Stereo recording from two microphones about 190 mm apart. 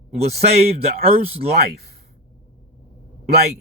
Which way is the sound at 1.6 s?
55° right (ahead or behind).